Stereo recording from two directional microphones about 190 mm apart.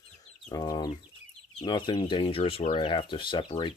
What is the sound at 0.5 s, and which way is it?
Speech, 20° left (ahead or behind).